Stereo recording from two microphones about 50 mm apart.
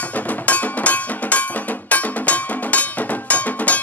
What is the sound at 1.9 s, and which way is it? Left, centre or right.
Music, left.